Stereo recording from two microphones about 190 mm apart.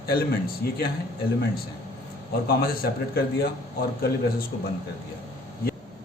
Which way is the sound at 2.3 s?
50° left (ahead or behind).